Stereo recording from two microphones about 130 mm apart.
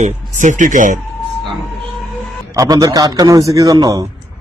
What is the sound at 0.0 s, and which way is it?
Speech, 75° right (ahead or behind).